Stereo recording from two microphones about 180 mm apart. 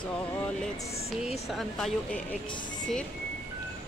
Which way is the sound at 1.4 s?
Centre (ahead or behind).